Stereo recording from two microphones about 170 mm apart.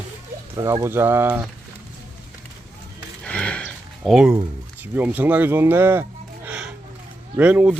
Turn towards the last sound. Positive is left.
turn(degrees=-10)  # may be behind; listen again after turning